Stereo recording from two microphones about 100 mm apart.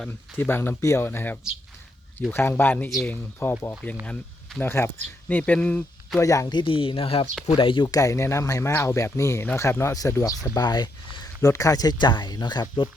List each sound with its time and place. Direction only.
0.3 s speech: 20° left (ahead or behind)
4.0 s speech: 10° left (ahead or behind)
4.6 s speech: 25° left (ahead or behind)
6.1 s speech: 35° left (ahead or behind)
6.5 s speech: 55° left (ahead or behind)
7.9 s speech: 35° left (ahead or behind)
11.4 s speech: 35° left (ahead or behind)